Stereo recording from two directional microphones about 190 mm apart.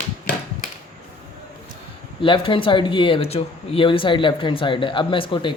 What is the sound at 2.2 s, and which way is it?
Speech, 25° left (ahead or behind).